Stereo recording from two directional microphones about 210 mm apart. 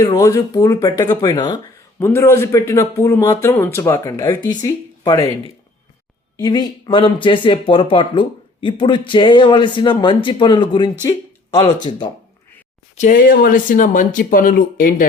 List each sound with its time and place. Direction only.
0.0 s speech: 20° left (ahead or behind)
6.3 s speech: 20° left (ahead or behind)
13.0 s speech: 40° left (ahead or behind)